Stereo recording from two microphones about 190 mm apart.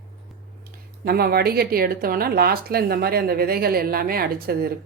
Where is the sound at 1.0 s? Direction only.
55° right (ahead or behind).